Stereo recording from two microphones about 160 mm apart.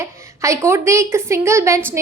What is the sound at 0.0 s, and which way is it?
A woman's voice, 15° right (ahead or behind).